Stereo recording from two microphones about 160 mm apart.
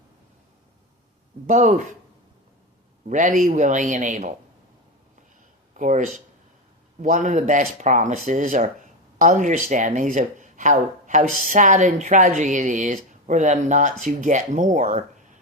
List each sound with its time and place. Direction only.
1.5 s speech: 50° right (ahead or behind)
3.1 s speech: 55° right (ahead or behind)
5.7 s speech: 50° right (ahead or behind)